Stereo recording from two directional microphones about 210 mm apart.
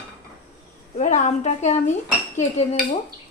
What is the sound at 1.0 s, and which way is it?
Speech, 35° left (ahead or behind).